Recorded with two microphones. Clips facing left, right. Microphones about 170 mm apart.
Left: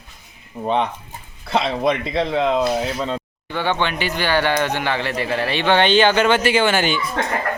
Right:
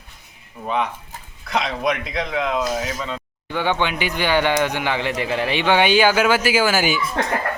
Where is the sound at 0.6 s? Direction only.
30° left (ahead or behind).